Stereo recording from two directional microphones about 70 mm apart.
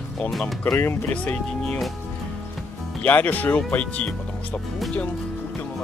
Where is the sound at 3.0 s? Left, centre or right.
Left.